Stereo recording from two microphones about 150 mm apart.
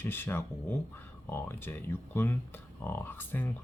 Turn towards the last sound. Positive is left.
turn(degrees=15)  # may be behind; listen again after turning